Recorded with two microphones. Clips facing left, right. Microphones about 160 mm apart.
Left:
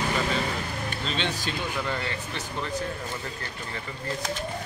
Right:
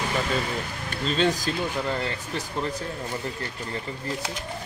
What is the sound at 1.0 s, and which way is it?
Speech, 40° right (ahead or behind).